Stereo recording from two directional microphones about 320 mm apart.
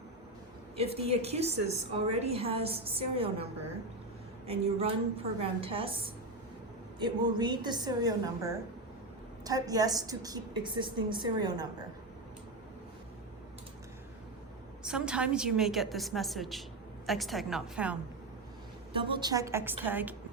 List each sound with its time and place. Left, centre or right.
0.8 s a woman's voice: centre
4.4 s a woman's voice: centre
7.0 s a woman's voice: centre
9.4 s a woman's voice: centre
14.8 s a woman's voice: centre
18.9 s a woman's voice: centre